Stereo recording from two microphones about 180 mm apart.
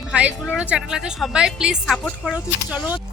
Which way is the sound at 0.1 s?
5° right (ahead or behind).